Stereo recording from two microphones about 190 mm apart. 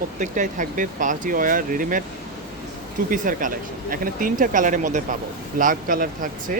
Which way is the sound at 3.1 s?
45° right (ahead or behind).